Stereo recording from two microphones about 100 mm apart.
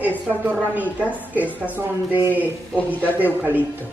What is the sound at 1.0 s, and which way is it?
Speech, 15° left (ahead or behind).